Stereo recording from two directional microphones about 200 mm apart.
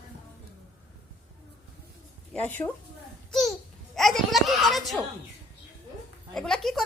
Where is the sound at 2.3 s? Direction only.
10° left (ahead or behind).